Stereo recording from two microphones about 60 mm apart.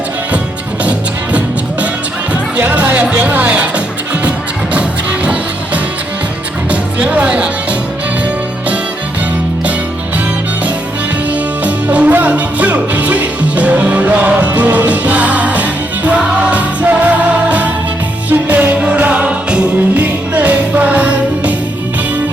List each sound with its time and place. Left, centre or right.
2.6 s music: right
4.7 s music: right
11.6 s music: right
20.0 s music: right